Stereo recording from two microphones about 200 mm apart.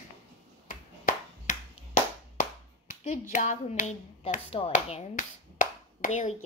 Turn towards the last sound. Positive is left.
turn(degrees=40)  # may be behind; listen again after turning